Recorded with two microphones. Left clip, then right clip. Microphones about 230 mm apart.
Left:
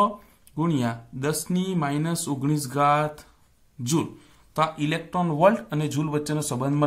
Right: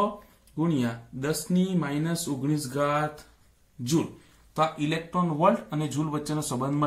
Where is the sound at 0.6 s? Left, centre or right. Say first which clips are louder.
Left 2 dB; left.